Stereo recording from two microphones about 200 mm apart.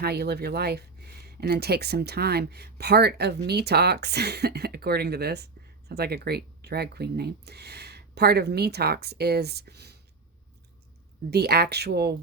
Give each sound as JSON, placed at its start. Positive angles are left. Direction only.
{"t": 0.0, "sound": "speech", "side_deg": -55}
{"t": 11.3, "sound": "speech", "side_deg": -55}